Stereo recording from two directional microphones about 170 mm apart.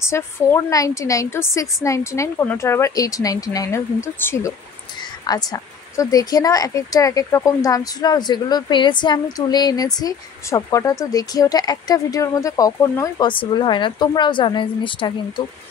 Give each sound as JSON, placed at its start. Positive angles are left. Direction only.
{"t": 0.0, "sound": "a woman's voice", "side_deg": 15}